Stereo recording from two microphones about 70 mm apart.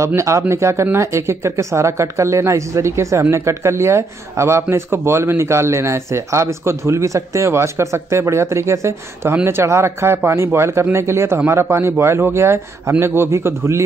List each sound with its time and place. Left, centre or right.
0.0 s speech: right